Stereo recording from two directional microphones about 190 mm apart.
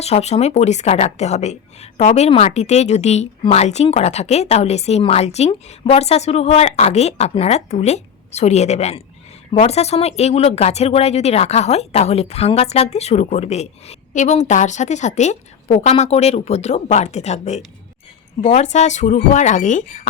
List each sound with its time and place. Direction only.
0.0 s a woman's voice: 35° left (ahead or behind)